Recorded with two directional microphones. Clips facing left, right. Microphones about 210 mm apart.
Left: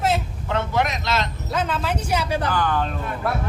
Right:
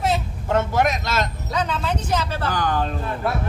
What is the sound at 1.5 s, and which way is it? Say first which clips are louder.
Speech: even; 5° left (ahead or behind).